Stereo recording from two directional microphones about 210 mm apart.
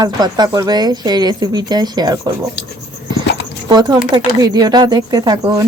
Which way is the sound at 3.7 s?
20° right (ahead or behind).